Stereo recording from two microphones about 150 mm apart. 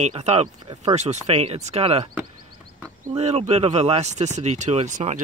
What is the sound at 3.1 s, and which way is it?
Speech, 45° right (ahead or behind).